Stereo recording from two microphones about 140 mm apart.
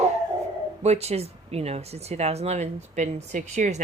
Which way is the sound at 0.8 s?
50° right (ahead or behind).